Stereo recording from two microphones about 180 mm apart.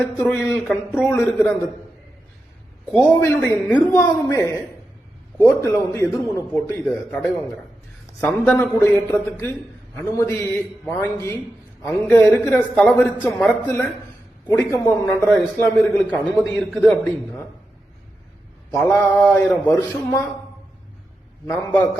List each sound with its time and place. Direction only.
0.0 s a man's voice: 10° left (ahead or behind)
2.9 s a man's voice: 10° left (ahead or behind)
8.2 s a man's voice: 10° left (ahead or behind)
18.9 s a man's voice: 10° left (ahead or behind)